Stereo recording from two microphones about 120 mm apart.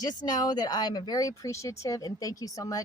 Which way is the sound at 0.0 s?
35° left (ahead or behind).